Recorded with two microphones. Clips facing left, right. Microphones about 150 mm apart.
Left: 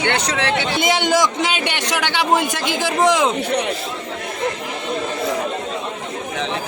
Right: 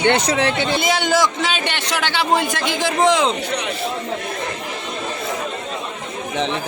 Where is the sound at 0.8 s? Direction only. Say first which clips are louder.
Left 2 dB; 15° left (ahead or behind).